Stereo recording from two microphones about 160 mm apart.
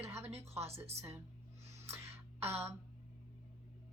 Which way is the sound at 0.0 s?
15° right (ahead or behind).